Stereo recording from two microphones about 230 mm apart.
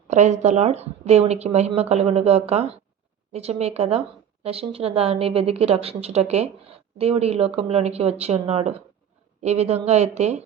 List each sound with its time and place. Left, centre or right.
0.1 s a woman's voice: right